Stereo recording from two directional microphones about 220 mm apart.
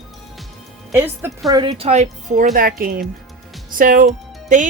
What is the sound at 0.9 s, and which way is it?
Speech, 10° right (ahead or behind).